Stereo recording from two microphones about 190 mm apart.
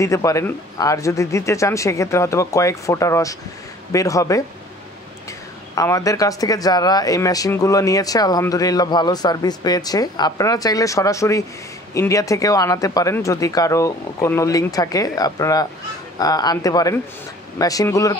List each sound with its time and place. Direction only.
0.0 s speech: 15° left (ahead or behind)
5.8 s speech: 15° left (ahead or behind)